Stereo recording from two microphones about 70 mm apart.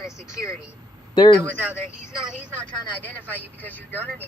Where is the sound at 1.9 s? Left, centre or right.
Centre.